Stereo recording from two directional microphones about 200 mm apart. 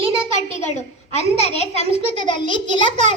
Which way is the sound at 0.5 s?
35° left (ahead or behind).